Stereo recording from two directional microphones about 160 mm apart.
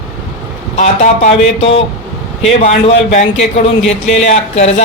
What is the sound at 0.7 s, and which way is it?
A man's voice, 45° left (ahead or behind).